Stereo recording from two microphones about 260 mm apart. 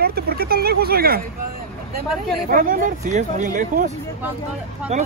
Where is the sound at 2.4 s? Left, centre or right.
Right.